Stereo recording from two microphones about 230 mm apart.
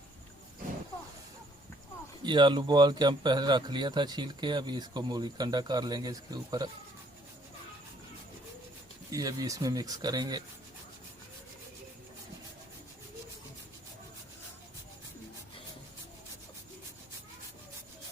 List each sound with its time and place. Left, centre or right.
2.2 s speech: centre
9.1 s speech: centre